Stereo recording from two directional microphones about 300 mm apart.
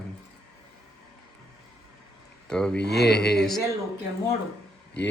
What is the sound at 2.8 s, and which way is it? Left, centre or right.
Speech, left.